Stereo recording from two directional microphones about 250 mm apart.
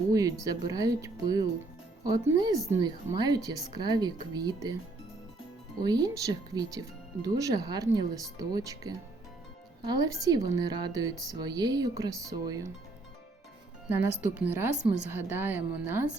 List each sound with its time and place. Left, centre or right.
0.1 s speech: centre
5.8 s speech: centre
13.9 s speech: centre